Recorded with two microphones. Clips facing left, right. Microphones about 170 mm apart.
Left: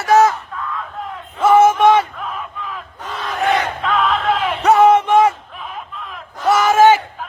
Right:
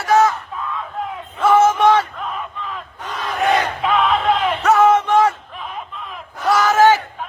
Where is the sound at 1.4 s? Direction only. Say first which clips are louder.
Left 2 dB; 10° left (ahead or behind).